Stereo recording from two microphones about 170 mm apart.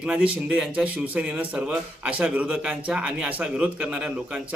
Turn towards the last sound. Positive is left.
turn(degrees=-5)  # may be behind; listen again after turning